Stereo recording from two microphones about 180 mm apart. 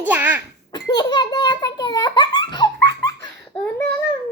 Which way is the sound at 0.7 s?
25° left (ahead or behind).